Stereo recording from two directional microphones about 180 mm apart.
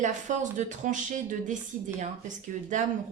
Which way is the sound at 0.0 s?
45° right (ahead or behind).